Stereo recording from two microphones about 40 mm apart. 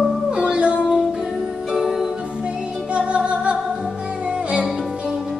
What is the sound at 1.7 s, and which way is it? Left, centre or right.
Music, centre.